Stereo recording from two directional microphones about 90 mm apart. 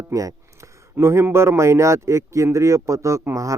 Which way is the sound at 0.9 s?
30° right (ahead or behind).